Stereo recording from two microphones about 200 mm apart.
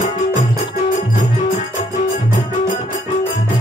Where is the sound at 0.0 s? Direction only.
40° left (ahead or behind).